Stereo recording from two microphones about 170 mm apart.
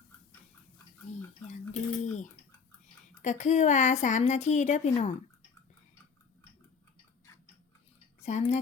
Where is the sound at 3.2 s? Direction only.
45° left (ahead or behind).